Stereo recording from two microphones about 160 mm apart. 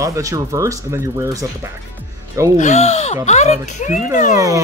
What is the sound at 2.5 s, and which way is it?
Speech, 45° left (ahead or behind).